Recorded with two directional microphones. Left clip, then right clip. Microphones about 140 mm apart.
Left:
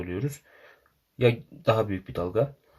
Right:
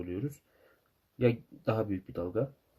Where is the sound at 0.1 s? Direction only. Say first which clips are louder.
Left 5 dB; 10° right (ahead or behind).